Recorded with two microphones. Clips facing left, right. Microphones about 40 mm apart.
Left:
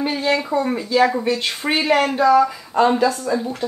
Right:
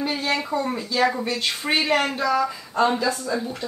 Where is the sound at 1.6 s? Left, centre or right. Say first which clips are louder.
Left 3 dB; left.